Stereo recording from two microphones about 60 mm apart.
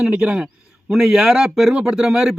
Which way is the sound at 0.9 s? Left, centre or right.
Centre.